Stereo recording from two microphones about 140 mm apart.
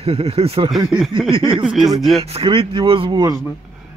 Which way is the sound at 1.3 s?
40° right (ahead or behind).